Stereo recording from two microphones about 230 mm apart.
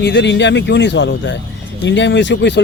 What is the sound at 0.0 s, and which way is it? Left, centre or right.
Speech, left.